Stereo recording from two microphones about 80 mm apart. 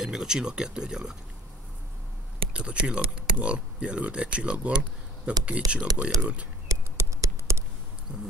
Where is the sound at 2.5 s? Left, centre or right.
Centre.